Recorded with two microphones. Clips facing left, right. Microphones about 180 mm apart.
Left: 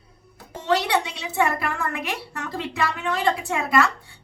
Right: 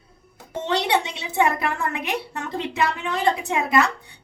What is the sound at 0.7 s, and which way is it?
Speech, 25° right (ahead or behind).